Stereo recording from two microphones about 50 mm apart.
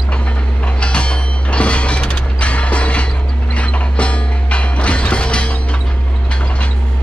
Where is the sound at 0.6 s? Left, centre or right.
Left.